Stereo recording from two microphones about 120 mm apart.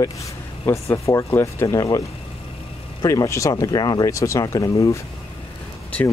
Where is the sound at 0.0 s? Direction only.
25° left (ahead or behind).